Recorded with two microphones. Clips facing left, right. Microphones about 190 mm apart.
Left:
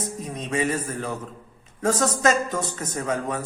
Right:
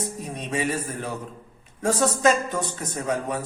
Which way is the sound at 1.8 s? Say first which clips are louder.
Right 1 dB; 15° right (ahead or behind).